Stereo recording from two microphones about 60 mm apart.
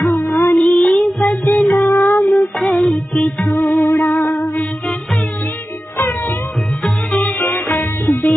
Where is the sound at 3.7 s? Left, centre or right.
Left.